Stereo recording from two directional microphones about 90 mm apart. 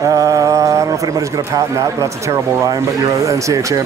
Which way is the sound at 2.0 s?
35° right (ahead or behind).